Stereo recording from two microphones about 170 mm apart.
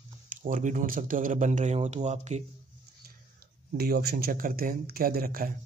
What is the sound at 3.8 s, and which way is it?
Speech, 65° right (ahead or behind).